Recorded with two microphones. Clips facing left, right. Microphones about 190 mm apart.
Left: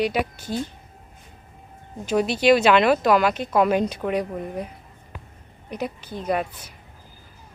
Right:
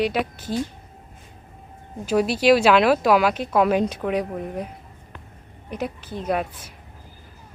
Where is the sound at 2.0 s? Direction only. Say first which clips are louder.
Right 1 dB; 5° right (ahead or behind).